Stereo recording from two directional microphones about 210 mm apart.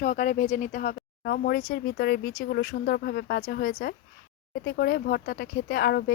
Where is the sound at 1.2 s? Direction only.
50° left (ahead or behind).